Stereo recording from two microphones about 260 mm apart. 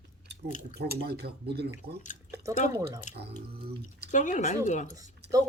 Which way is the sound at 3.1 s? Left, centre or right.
Left.